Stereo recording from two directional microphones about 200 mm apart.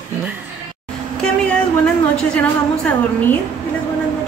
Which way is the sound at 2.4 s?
5° left (ahead or behind).